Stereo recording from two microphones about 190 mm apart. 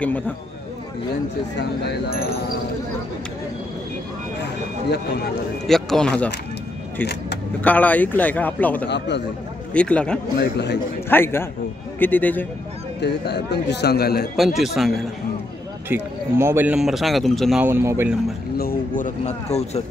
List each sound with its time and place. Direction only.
1.6 s speech: 55° left (ahead or behind)
5.7 s speech: 5° left (ahead or behind)
7.6 s speech: 10° left (ahead or behind)
8.8 s speech: 65° left (ahead or behind)
9.8 s speech: 5° left (ahead or behind)
10.4 s speech: 65° left (ahead or behind)
11.1 s speech: 10° left (ahead or behind)
13.0 s speech: 60° left (ahead or behind)
14.3 s speech: centre (ahead or behind)
15.9 s speech: 10° right (ahead or behind)
17.6 s speech: 10° right (ahead or behind)
18.6 s speech: 45° left (ahead or behind)